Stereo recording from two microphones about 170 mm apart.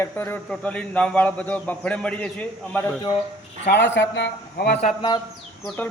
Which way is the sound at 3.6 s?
90° left.